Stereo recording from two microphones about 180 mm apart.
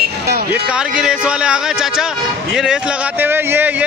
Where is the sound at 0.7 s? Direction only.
5° right (ahead or behind).